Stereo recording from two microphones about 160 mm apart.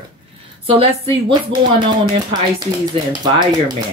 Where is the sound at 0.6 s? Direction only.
35° right (ahead or behind).